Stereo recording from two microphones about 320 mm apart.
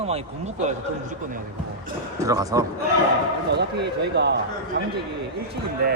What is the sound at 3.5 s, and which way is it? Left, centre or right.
Speech, right.